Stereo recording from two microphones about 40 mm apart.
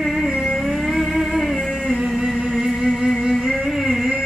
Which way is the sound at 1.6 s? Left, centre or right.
Centre.